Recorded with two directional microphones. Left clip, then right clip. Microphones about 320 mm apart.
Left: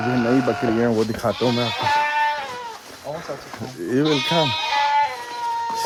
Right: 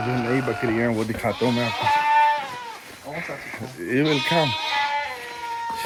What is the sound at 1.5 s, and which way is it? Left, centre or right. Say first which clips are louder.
Music: left 1 dB; left.